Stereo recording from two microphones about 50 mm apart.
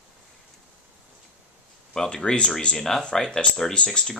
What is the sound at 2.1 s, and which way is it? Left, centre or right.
Speech, centre.